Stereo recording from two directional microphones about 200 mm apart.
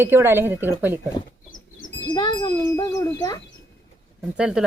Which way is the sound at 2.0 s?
20° left (ahead or behind).